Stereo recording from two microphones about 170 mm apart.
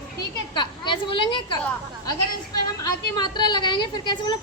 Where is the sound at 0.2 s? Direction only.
25° left (ahead or behind).